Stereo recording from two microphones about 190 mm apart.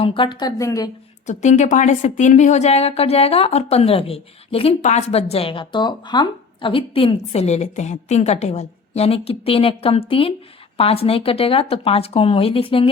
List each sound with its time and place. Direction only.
0.0 s speech: 25° left (ahead or behind)
1.3 s a woman's voice: 40° left (ahead or behind)